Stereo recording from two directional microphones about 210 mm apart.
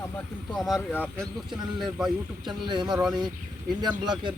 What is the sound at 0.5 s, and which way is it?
Speech, centre (ahead or behind).